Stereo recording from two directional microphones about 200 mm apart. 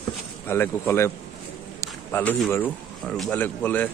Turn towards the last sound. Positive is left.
turn(degrees=10)  # may be behind; listen again after turning